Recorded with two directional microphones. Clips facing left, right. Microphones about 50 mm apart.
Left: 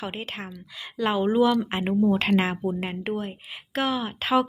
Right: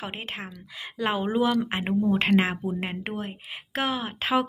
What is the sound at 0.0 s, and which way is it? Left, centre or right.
Speech, right.